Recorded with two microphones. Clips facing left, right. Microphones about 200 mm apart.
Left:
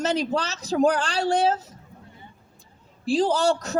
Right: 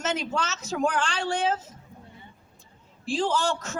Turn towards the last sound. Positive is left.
turn(degrees=35)  # may be behind; listen again after turning